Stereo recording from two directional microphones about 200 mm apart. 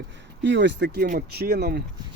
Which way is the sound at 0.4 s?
60° right (ahead or behind).